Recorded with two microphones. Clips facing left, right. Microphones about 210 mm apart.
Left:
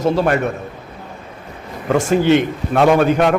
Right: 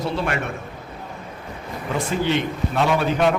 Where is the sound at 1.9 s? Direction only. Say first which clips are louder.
Left 9 dB; 50° left (ahead or behind).